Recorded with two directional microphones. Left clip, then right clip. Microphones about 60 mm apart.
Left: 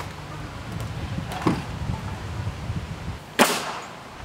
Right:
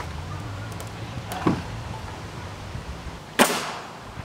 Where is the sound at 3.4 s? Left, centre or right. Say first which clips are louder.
Even; centre.